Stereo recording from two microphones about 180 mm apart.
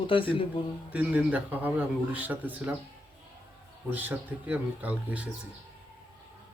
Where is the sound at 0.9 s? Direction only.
10° right (ahead or behind).